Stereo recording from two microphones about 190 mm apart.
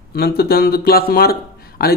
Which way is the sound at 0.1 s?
55° left (ahead or behind).